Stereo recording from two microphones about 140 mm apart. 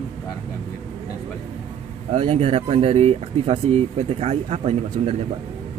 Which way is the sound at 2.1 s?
45° right (ahead or behind).